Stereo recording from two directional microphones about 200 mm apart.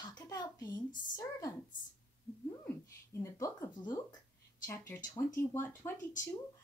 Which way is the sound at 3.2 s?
15° left (ahead or behind).